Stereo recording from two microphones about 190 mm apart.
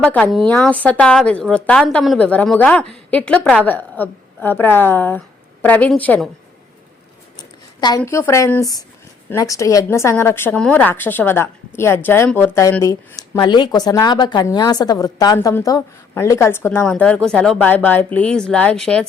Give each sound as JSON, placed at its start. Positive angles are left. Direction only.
{"t": 0.0, "sound": "a woman's voice", "side_deg": 5}
{"t": 7.3, "sound": "speech", "side_deg": 20}